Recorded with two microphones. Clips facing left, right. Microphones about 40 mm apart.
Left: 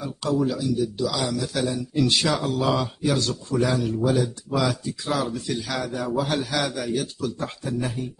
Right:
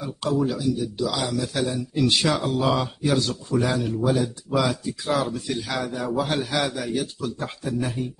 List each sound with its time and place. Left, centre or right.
0.4 s speech: centre
7.4 s speech: centre